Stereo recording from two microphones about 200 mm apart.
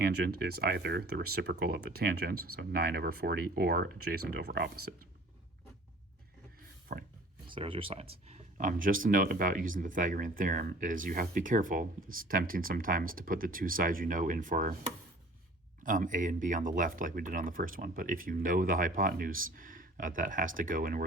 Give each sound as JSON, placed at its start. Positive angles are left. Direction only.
{"t": 0.0, "sound": "speech", "side_deg": -50}
{"t": 6.9, "sound": "speech", "side_deg": -40}
{"t": 7.4, "sound": "speech", "side_deg": -25}
{"t": 8.3, "sound": "speech", "side_deg": -40}
{"t": 15.8, "sound": "speech", "side_deg": -40}